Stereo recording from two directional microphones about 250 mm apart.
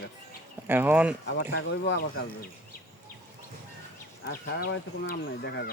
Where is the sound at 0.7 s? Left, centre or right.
Centre.